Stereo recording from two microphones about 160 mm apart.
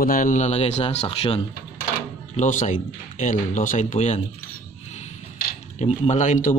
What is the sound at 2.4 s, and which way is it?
Speech, 50° left (ahead or behind).